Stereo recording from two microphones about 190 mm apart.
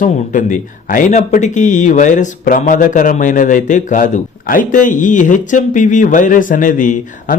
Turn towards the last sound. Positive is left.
turn(degrees=40)  # may be behind; listen again after turning